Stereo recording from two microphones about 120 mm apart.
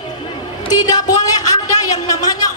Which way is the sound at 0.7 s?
30° left (ahead or behind).